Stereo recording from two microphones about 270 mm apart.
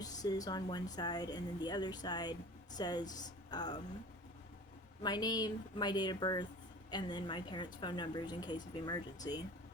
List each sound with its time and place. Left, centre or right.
0.0 s a sound: centre
0.9 s speech: centre
5.0 s speech: centre